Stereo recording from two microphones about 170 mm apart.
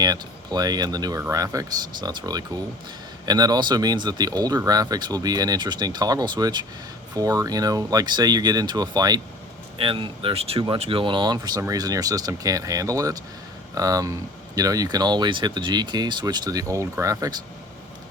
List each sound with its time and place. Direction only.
0.0 s speech: 25° right (ahead or behind)